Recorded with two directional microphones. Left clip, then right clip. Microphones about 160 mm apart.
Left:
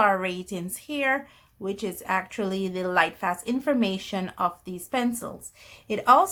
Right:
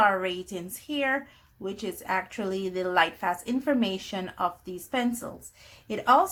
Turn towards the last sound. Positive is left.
turn(degrees=25)  # may be behind; listen again after turning